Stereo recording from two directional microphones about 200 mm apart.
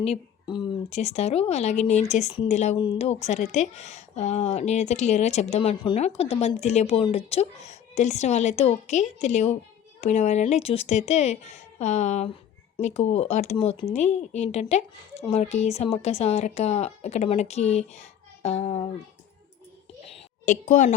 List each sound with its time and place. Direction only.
0.0 s speech: 25° left (ahead or behind)
20.4 s speech: 40° left (ahead or behind)